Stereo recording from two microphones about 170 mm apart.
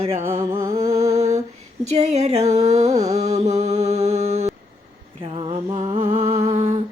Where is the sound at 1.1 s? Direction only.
40° right (ahead or behind).